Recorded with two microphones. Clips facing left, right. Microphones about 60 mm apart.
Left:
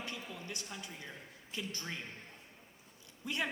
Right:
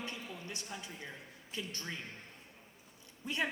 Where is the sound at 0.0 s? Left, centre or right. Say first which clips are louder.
Even; right.